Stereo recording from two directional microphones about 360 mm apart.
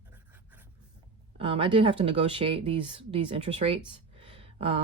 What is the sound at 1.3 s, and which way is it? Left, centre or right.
Speech, centre.